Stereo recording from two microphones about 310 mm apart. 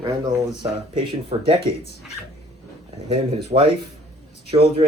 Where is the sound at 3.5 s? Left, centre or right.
Right.